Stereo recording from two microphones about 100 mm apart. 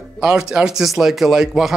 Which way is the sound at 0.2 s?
5° right (ahead or behind).